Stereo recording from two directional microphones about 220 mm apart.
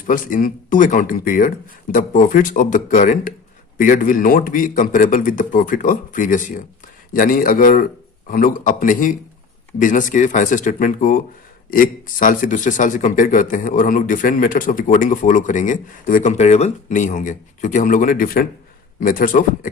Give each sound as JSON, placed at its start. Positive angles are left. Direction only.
{"t": 0.1, "sound": "speech", "side_deg": 40}